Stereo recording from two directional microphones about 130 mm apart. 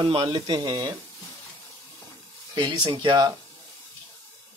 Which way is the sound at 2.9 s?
40° right (ahead or behind).